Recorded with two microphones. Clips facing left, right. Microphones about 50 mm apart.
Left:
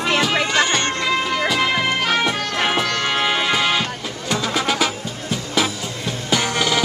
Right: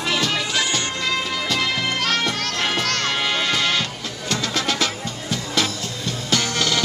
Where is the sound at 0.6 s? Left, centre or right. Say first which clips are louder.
Left 5 dB; left.